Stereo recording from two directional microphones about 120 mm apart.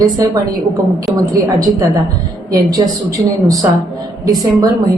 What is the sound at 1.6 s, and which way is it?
A woman's voice, 30° right (ahead or behind).